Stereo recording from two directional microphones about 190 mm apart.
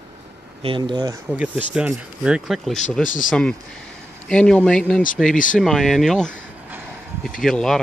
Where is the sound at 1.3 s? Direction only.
5° right (ahead or behind).